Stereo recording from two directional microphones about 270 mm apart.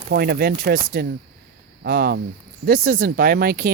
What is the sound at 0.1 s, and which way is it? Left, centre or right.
Speech, right.